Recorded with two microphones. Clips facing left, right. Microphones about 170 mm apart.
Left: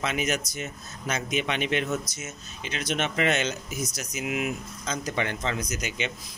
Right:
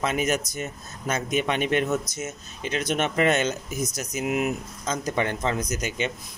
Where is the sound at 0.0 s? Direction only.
45° right (ahead or behind).